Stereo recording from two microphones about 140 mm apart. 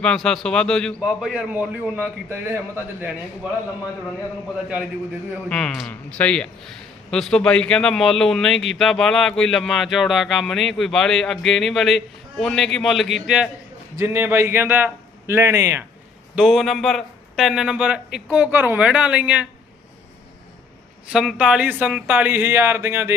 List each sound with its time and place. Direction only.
0.0 s a man's voice: 5° left (ahead or behind); by 3.1 s 20° right (ahead or behind)
5.5 s a man's voice: 5° left (ahead or behind)
13.9 s a man's voice: 20° right (ahead or behind)
16.3 s a man's voice: 5° right (ahead or behind)
21.1 s a man's voice: 5° right (ahead or behind)